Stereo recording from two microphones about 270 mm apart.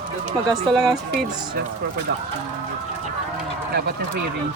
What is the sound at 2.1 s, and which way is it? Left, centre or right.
Speech, right.